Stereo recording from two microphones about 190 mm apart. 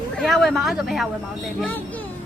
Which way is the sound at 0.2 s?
Centre (ahead or behind).